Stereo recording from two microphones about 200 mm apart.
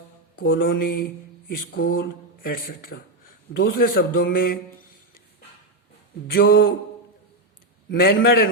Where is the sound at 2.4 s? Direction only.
45° left (ahead or behind).